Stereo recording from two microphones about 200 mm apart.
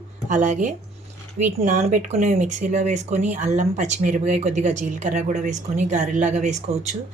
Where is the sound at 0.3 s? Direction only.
35° right (ahead or behind).